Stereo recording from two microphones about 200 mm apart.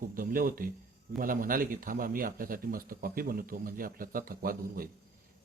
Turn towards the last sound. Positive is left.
turn(degrees=-45)  # may be behind; listen again after turning